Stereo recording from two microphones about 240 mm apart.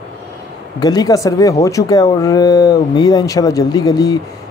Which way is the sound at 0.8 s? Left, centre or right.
Centre.